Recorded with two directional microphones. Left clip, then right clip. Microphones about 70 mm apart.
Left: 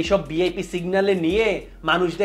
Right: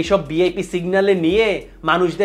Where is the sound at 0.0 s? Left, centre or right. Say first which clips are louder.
Right 4 dB; right.